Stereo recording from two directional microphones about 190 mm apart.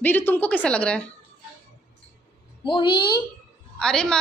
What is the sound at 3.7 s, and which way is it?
Speech, 5° left (ahead or behind).